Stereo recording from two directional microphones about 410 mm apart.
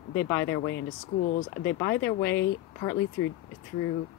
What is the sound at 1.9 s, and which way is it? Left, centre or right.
Speech, left.